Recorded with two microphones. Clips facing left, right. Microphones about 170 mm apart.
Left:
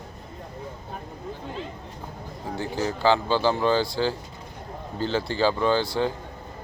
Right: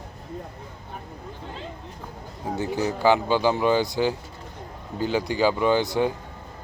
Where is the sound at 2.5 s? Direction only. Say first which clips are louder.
Right 2 dB; 20° right (ahead or behind).